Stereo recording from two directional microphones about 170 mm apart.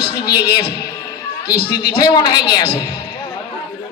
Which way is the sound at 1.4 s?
65° left (ahead or behind).